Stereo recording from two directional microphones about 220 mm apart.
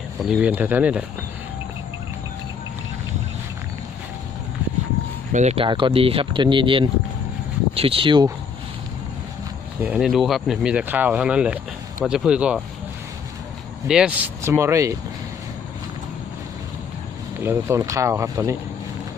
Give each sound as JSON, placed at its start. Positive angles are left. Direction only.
{"t": 0.2, "sound": "speech", "side_deg": -5}
{"t": 5.3, "sound": "speech", "side_deg": -30}
{"t": 9.8, "sound": "speech", "side_deg": -5}
{"t": 13.8, "sound": "speech", "side_deg": -5}
{"t": 17.4, "sound": "speech", "side_deg": -10}